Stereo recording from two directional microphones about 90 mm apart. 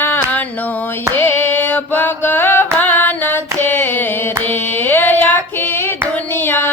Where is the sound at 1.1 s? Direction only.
20° left (ahead or behind).